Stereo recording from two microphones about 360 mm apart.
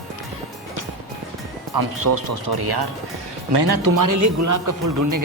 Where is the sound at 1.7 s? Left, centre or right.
Right.